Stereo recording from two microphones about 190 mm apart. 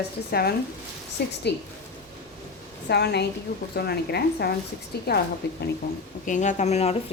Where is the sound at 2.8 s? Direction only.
60° left (ahead or behind).